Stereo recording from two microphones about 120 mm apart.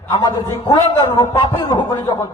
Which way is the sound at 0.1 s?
35° left (ahead or behind).